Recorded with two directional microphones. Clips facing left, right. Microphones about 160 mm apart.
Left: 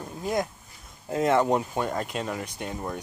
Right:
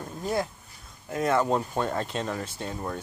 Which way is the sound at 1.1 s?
25° left (ahead or behind).